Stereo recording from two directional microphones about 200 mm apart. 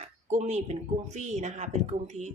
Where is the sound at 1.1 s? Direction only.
35° right (ahead or behind).